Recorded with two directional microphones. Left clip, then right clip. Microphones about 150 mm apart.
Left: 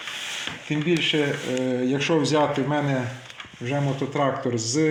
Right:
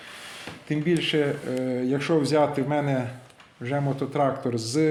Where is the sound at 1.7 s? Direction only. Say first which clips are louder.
Left 1 dB; 20° right (ahead or behind).